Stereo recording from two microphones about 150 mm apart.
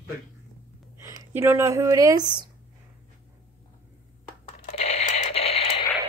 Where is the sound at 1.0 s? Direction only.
20° right (ahead or behind).